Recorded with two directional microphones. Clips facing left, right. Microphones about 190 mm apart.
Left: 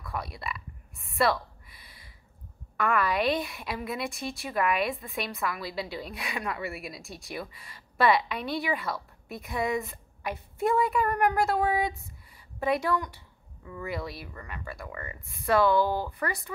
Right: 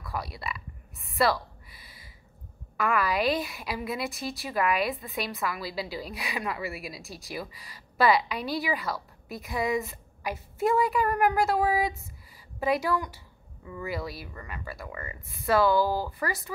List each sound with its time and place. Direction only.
0.0 s a woman's voice: centre (ahead or behind)